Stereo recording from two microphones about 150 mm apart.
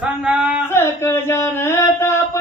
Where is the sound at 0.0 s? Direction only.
5° right (ahead or behind).